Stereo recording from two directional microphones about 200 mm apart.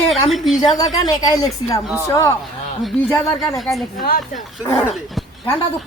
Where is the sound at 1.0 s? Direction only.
20° left (ahead or behind).